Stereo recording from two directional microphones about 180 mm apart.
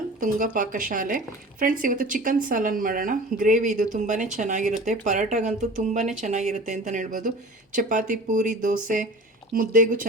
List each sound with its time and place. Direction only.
0.2 s speech: 50° right (ahead or behind)